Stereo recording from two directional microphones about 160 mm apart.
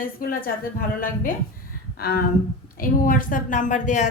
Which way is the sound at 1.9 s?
75° left (ahead or behind).